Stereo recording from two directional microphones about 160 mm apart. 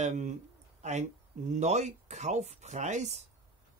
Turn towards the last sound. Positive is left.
turn(degrees=-45)  # may be behind; listen again after turning